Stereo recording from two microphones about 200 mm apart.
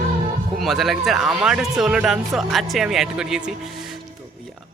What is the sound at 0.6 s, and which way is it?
Speech, centre (ahead or behind).